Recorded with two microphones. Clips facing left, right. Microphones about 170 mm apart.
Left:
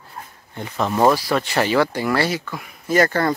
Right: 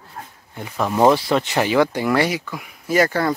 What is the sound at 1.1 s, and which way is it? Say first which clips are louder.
Speech: right 1 dB; 20° right (ahead or behind).